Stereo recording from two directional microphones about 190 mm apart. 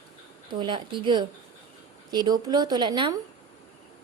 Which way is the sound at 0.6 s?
25° right (ahead or behind).